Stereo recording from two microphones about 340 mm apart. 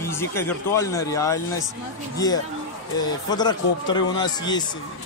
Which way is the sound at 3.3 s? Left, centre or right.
Centre.